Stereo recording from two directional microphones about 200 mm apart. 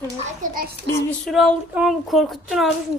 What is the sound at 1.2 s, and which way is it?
Speech, centre (ahead or behind).